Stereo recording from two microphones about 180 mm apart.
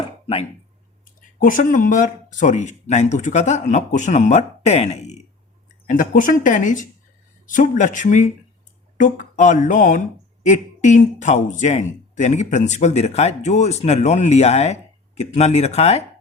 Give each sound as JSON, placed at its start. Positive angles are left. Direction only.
{"t": 0.0, "sound": "chopping", "side_deg": 30}
{"t": 1.5, "sound": "a man's voice", "side_deg": 50}
{"t": 5.9, "sound": "a man's voice", "side_deg": 50}